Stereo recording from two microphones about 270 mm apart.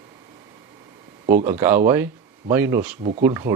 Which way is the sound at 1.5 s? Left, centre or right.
Centre.